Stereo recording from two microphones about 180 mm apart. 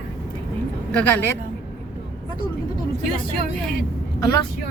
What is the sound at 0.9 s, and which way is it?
Speech, 10° left (ahead or behind).